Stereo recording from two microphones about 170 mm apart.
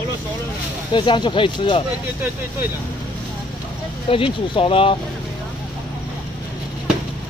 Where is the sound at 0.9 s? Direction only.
30° left (ahead or behind).